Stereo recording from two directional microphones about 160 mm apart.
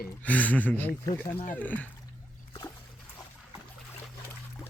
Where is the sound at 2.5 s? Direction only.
20° left (ahead or behind).